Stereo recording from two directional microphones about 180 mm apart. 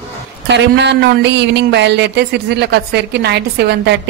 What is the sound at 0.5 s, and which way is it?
A woman's voice, 75° right (ahead or behind).